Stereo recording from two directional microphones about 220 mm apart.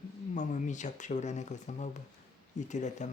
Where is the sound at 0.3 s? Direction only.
35° left (ahead or behind).